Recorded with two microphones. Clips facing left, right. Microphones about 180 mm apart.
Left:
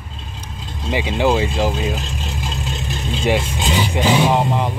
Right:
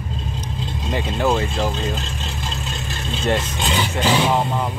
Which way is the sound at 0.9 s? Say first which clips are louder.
Left 3 dB; 10° left (ahead or behind).